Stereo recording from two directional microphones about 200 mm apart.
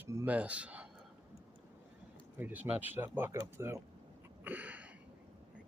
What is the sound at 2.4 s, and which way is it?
Speech, 10° right (ahead or behind).